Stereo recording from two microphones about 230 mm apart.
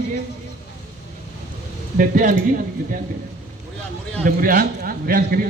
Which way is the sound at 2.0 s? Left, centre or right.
Right.